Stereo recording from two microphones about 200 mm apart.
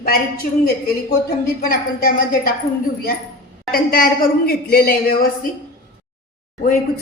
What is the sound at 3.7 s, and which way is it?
A woman's voice, 45° left (ahead or behind).